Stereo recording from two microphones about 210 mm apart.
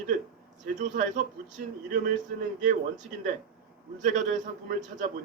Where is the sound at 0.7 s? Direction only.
35° right (ahead or behind).